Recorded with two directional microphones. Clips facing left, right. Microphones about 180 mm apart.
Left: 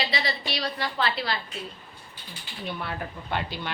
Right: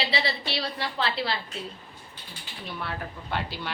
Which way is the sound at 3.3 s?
Centre (ahead or behind).